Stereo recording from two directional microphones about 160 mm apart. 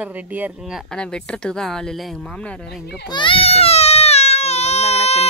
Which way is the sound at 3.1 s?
30° left (ahead or behind).